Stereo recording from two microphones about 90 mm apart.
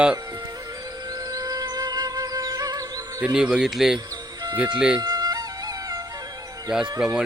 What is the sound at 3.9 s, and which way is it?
Music, 50° right (ahead or behind).